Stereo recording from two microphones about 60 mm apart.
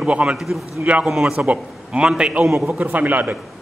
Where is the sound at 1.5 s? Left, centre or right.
Centre.